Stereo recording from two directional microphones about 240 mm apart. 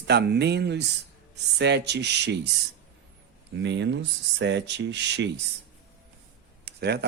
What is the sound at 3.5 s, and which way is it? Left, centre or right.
Speech, right.